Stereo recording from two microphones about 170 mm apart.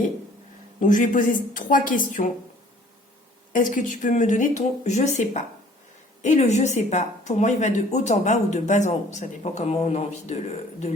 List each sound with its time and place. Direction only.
0.8 s a woman's voice: 50° left (ahead or behind)
3.5 s a woman's voice: 50° left (ahead or behind)